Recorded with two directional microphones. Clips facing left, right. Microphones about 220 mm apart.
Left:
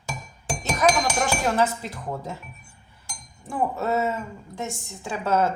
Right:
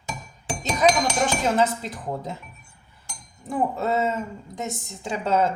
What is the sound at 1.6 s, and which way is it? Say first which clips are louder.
Speech: right 1 dB; 20° right (ahead or behind).